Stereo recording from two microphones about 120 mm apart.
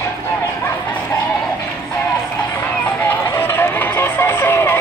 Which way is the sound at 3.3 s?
20° left (ahead or behind).